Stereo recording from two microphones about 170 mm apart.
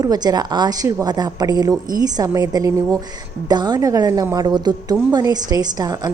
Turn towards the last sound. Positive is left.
turn(degrees=-25)  # may be behind; listen again after turning